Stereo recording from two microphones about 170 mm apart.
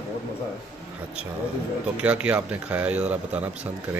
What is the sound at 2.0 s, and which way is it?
Speech, 10° right (ahead or behind).